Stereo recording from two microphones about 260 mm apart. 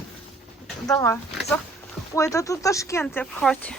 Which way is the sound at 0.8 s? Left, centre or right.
Centre.